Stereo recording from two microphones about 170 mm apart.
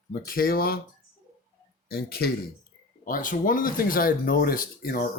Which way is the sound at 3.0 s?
55° left (ahead or behind).